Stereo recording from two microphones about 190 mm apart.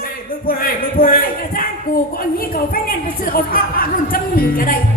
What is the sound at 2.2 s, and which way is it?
A woman's voice, 50° left (ahead or behind).